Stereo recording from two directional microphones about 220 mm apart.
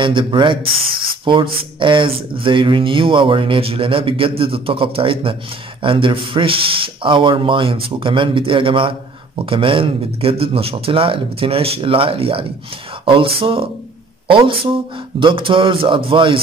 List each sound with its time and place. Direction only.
0.0 s speech: 20° right (ahead or behind)